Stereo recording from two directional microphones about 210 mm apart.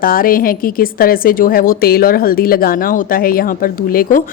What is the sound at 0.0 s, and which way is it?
A woman's voice, 45° left (ahead or behind).